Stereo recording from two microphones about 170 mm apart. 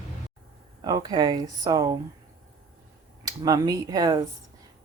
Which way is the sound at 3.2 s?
20° right (ahead or behind).